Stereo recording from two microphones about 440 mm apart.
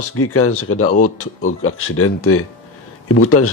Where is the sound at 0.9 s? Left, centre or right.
Centre.